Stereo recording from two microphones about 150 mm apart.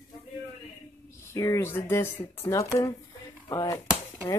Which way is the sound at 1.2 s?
20° left (ahead or behind).